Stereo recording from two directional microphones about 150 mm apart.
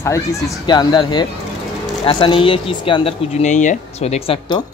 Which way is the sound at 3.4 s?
55° left (ahead or behind).